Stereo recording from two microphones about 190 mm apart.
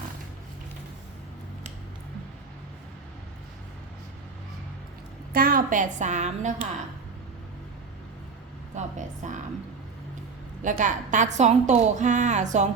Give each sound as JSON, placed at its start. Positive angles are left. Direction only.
{"t": 5.3, "sound": "a woman's voice", "side_deg": -50}
{"t": 8.7, "sound": "a woman's voice", "side_deg": -40}
{"t": 10.6, "sound": "a woman's voice", "side_deg": -40}